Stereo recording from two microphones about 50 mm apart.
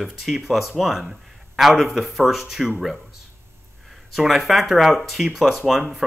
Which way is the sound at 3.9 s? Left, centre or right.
Centre.